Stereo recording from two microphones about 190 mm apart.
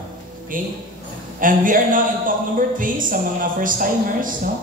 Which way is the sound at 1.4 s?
45° right (ahead or behind).